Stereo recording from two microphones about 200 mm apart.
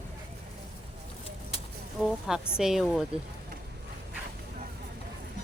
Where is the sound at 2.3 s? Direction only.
5° right (ahead or behind).